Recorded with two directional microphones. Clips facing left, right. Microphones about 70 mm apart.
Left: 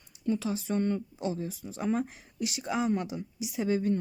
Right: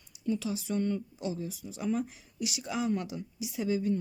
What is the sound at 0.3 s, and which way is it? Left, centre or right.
Speech, left.